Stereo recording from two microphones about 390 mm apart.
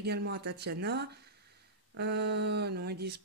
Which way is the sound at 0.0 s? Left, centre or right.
Right.